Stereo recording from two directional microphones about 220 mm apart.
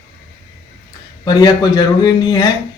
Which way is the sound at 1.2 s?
20° left (ahead or behind).